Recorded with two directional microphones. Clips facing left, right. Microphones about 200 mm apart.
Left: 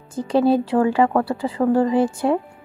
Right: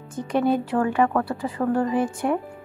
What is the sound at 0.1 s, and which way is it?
Speech, 30° left (ahead or behind).